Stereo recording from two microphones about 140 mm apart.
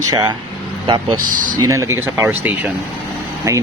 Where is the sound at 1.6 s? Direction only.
20° right (ahead or behind).